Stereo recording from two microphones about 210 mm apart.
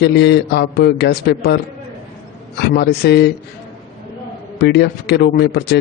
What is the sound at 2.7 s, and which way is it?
Speech, 50° left (ahead or behind).